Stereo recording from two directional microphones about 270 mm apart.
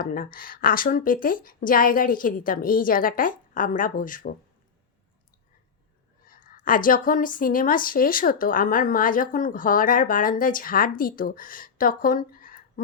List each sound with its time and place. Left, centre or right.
0.0 s a woman's voice: left
6.2 s a woman's voice: left